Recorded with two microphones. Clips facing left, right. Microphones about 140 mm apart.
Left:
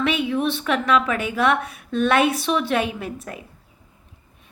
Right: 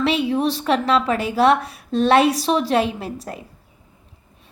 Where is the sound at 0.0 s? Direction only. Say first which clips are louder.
Right 2 dB; 35° right (ahead or behind).